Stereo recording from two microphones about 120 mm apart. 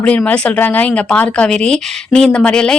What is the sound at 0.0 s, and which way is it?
A woman's voice, 10° left (ahead or behind).